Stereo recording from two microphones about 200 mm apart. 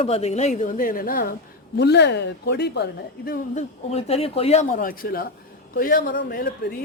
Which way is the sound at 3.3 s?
35° left (ahead or behind).